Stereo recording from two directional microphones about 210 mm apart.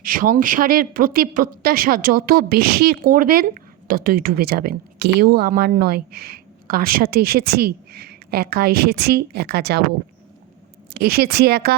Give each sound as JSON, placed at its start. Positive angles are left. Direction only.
{"t": 0.0, "sound": "speech", "side_deg": -40}
{"t": 10.9, "sound": "speech", "side_deg": -45}